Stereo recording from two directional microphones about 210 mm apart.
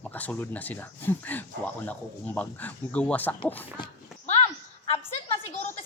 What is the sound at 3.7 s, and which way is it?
Horse, 20° left (ahead or behind).